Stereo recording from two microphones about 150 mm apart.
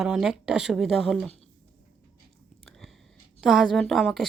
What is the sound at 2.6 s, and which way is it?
Chewing, centre (ahead or behind).